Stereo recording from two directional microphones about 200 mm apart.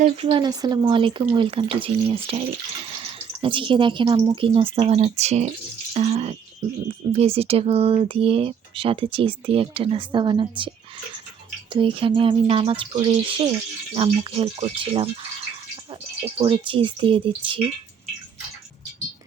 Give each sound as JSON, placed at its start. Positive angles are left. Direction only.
{"t": 0.0, "sound": "speech", "side_deg": -25}
{"t": 16.4, "sound": "speech", "side_deg": -25}